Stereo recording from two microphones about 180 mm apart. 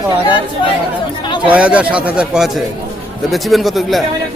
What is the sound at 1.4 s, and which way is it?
A man's voice, 5° right (ahead or behind).